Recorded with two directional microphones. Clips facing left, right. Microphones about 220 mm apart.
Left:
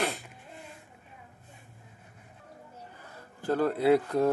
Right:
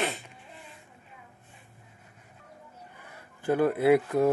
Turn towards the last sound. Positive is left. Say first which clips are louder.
# right 2 dB
turn(degrees=-5)  # may be behind; listen again after turning